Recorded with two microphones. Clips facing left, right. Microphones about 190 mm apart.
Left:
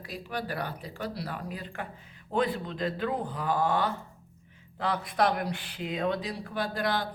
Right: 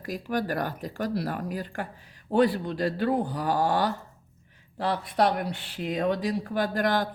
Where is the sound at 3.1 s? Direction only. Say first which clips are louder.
Right 6 dB; 75° right (ahead or behind).